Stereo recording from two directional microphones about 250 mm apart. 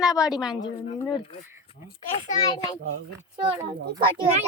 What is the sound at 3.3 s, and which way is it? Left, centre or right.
Speech, centre.